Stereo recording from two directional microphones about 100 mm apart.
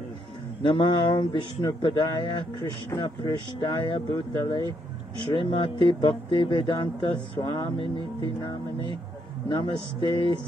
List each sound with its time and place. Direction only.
0.6 s speech: 55° left (ahead or behind)
9.5 s speech: 55° left (ahead or behind)